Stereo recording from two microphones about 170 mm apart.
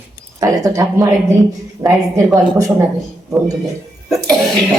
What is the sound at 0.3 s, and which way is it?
A man's voice, 20° right (ahead or behind).